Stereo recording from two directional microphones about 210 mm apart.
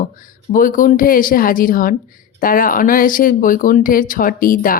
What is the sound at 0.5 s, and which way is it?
Speech, 40° left (ahead or behind).